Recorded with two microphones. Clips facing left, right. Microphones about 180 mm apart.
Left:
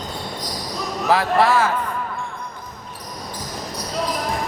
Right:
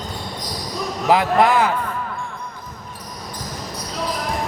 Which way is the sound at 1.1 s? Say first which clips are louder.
Right 1 dB; 20° right (ahead or behind).